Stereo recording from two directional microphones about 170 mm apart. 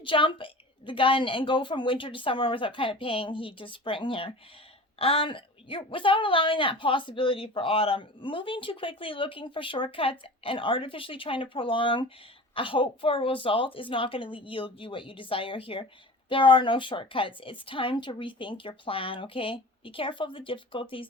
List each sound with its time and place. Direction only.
0.0 s a woman's voice: 30° left (ahead or behind)